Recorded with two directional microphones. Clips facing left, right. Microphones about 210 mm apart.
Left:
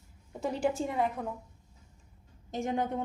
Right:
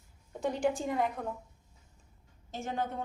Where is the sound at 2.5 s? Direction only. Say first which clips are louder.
Left 4 dB; 15° left (ahead or behind).